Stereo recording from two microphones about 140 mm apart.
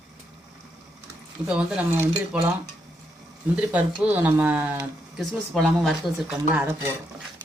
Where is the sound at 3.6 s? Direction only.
10° right (ahead or behind).